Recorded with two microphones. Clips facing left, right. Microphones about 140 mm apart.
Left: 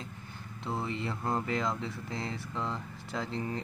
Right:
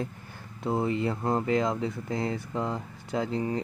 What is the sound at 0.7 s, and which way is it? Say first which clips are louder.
Speech: right 8 dB; 45° right (ahead or behind).